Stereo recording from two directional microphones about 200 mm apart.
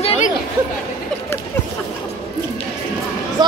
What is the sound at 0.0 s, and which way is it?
Chatter, 30° left (ahead or behind).